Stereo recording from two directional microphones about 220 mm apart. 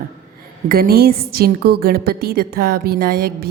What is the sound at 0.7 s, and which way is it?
A woman's voice, 45° right (ahead or behind).